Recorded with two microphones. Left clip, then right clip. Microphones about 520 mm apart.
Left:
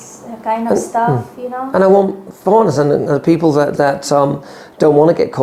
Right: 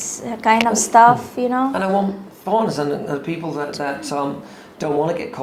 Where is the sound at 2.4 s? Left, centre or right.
Left.